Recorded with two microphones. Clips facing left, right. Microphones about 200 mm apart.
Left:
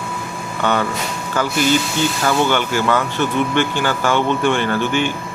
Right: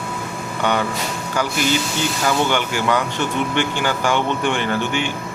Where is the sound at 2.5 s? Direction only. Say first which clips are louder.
Left 2 dB; 15° right (ahead or behind).